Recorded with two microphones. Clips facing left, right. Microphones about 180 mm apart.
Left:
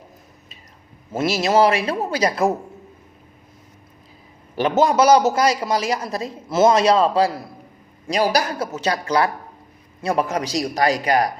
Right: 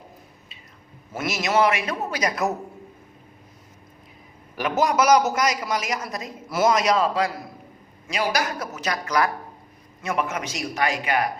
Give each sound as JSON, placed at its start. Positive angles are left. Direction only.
{"t": 1.1, "sound": "a man's voice", "side_deg": 30}
{"t": 4.5, "sound": "a man's voice", "side_deg": 25}